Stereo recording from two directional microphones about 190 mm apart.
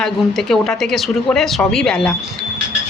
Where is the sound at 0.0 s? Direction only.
Centre (ahead or behind).